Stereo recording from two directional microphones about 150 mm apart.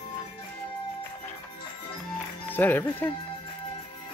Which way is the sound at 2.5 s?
15° left (ahead or behind).